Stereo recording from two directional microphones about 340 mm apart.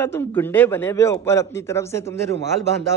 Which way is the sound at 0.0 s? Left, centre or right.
Centre.